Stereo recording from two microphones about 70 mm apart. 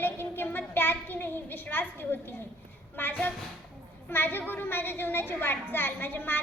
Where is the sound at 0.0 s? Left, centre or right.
Left.